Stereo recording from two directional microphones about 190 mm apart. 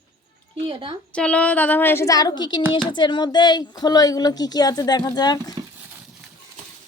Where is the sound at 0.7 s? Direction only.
25° right (ahead or behind).